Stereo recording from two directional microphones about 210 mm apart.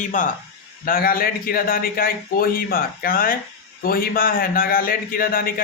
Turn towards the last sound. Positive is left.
turn(degrees=45)  # may be behind; listen again after turning